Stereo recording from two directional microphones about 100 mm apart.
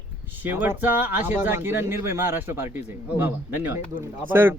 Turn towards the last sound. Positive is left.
turn(degrees=-20)  # may be behind; listen again after turning